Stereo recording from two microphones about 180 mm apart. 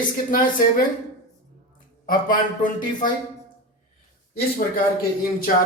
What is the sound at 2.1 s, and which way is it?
Speech, 50° left (ahead or behind).